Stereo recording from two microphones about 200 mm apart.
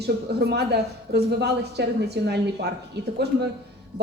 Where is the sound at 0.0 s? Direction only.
55° right (ahead or behind).